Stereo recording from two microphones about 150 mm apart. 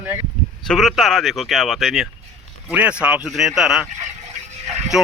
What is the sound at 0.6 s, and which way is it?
A man's voice, centre (ahead or behind).